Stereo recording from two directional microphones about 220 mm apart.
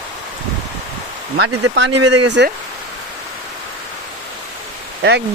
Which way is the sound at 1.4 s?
50° right (ahead or behind).